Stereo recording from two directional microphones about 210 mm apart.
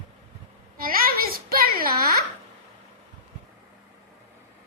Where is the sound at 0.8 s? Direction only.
45° right (ahead or behind).